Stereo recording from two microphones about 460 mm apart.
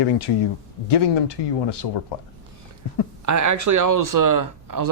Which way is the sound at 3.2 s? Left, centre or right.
Right.